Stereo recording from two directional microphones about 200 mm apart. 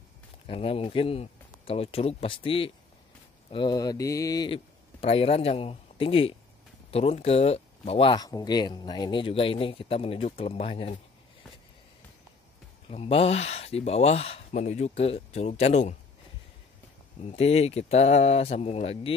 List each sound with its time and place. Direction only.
0.5 s speech: 30° left (ahead or behind)
5.0 s speech: 30° left (ahead or behind)
12.9 s speech: 30° left (ahead or behind)
17.2 s speech: 30° left (ahead or behind)